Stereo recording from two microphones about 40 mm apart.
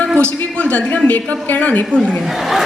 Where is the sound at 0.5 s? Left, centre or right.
Left.